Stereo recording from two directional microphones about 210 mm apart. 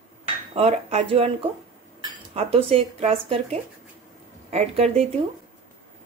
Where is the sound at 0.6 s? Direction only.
30° right (ahead or behind).